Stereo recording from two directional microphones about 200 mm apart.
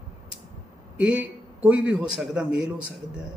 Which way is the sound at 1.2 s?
5° right (ahead or behind).